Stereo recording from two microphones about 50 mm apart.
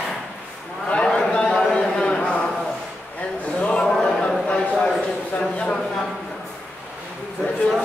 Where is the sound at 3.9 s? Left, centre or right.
Centre.